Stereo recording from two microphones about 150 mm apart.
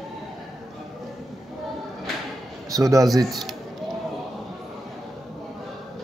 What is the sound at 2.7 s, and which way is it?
Speech, 20° right (ahead or behind).